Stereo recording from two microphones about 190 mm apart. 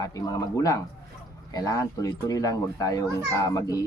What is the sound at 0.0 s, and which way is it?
A man's voice, 20° left (ahead or behind).